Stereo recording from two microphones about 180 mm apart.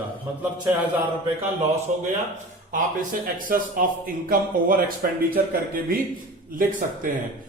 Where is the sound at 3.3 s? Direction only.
50° right (ahead or behind).